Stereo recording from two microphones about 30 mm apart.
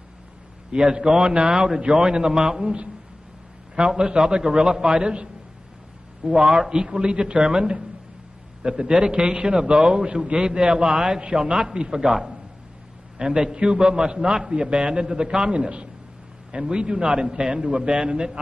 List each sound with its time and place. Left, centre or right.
0.7 s a man's voice: right
1.2 s a man's voice: right
3.7 s a man's voice: right
12.1 s a man's voice: centre
13.2 s a man's voice: right